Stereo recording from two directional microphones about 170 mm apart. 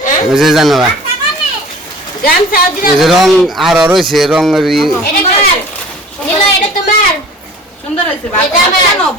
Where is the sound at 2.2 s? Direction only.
60° left (ahead or behind).